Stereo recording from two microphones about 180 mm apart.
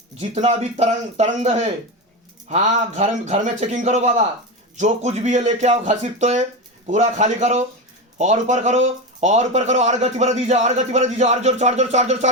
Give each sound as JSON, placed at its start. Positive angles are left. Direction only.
{"t": 0.2, "sound": "speech", "side_deg": -40}